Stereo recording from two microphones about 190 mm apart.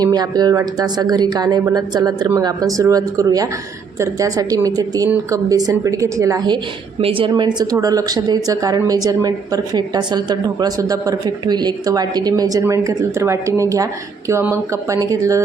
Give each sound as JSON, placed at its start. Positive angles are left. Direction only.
{"t": 0.0, "sound": "speech", "side_deg": -20}